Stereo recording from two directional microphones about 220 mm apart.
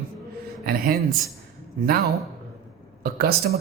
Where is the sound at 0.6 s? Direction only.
40° right (ahead or behind).